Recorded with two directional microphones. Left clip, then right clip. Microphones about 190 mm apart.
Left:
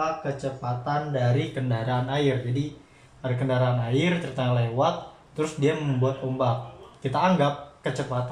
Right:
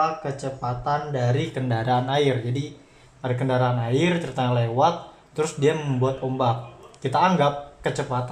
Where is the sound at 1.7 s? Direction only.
55° right (ahead or behind).